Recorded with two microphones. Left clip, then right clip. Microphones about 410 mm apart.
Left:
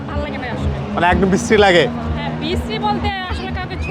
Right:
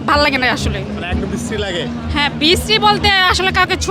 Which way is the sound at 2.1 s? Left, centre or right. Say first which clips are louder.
Right 9 dB; right.